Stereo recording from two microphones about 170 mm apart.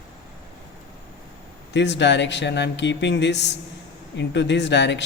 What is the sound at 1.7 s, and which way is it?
Speech, 90° left.